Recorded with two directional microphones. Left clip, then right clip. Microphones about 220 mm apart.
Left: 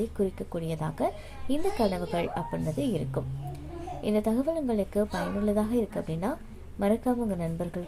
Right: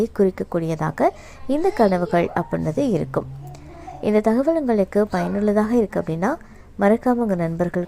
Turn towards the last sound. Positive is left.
turn(degrees=-30)  # may be behind; listen again after turning